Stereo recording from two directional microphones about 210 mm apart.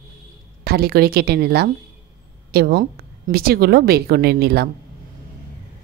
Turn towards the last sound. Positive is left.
turn(degrees=-50)  # may be behind; listen again after turning